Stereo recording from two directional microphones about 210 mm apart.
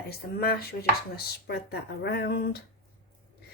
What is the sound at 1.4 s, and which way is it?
Speech, 50° left (ahead or behind).